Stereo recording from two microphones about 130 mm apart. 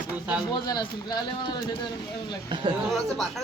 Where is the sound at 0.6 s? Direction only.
35° left (ahead or behind).